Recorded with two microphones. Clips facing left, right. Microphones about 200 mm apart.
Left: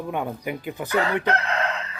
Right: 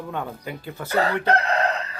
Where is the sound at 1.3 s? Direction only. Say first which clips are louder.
Right 4 dB; 35° right (ahead or behind).